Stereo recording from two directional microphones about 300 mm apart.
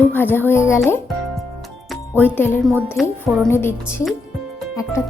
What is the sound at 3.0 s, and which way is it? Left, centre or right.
Speech, centre.